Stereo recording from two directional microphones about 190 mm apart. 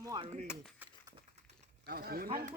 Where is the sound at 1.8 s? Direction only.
55° right (ahead or behind).